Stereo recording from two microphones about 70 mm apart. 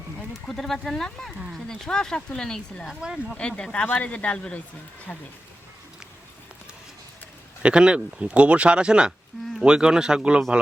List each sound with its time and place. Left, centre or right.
0.4 s speech: centre
2.8 s speech: centre
3.3 s speech: centre
7.6 s speech: centre